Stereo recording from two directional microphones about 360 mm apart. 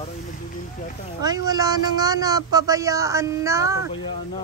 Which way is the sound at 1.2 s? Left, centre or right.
Centre.